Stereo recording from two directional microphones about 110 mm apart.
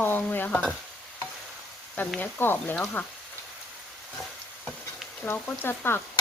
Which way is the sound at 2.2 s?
20° left (ahead or behind).